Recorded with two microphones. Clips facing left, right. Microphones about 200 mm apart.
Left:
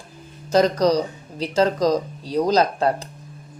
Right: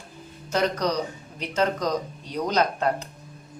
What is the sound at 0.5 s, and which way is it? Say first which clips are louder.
Speech: left 7 dB; 35° left (ahead or behind).